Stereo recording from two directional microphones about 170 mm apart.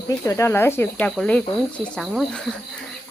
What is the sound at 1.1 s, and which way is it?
Speech, 5° left (ahead or behind).